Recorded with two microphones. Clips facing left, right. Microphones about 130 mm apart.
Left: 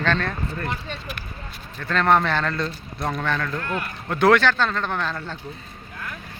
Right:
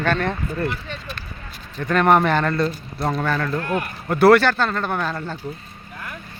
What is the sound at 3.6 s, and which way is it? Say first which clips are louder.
Speech: right 4 dB; 20° right (ahead or behind).